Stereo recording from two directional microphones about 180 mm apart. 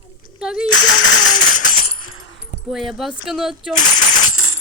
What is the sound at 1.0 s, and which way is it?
Music, 90° left.